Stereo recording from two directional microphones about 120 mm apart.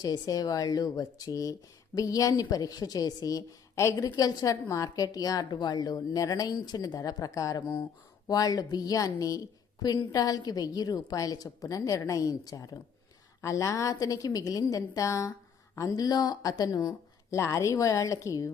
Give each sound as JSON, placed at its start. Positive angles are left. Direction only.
{"t": 0.0, "sound": "a woman's voice", "side_deg": 35}